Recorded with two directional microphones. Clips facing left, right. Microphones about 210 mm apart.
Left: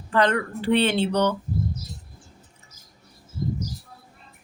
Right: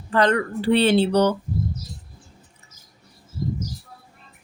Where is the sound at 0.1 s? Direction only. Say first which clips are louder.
Right 2 dB; 35° right (ahead or behind).